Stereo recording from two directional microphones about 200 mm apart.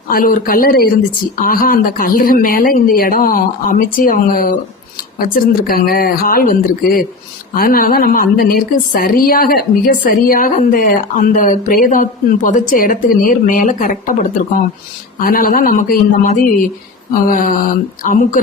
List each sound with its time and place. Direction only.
0.1 s a woman's voice: 45° left (ahead or behind)